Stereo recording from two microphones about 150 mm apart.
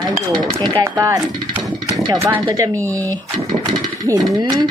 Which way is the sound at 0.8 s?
20° right (ahead or behind).